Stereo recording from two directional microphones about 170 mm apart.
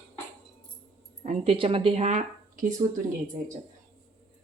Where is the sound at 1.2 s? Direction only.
35° right (ahead or behind).